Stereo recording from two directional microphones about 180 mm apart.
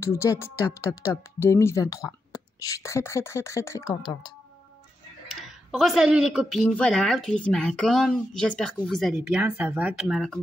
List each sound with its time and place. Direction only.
0.0 s speech: 15° left (ahead or behind)
5.3 s speech: centre (ahead or behind)